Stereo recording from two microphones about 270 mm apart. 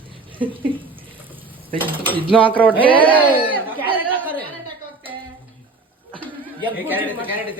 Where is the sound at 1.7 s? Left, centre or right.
Centre.